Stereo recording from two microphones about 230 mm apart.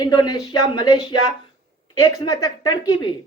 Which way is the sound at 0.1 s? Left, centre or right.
Centre.